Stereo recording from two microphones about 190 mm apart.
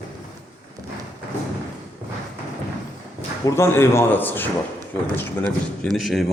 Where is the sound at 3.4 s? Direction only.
15° left (ahead or behind).